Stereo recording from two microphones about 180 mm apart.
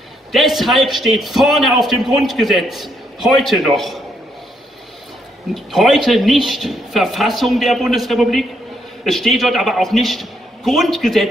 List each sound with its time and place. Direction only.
0.3 s a man's voice: centre (ahead or behind)
5.5 s a man's voice: centre (ahead or behind)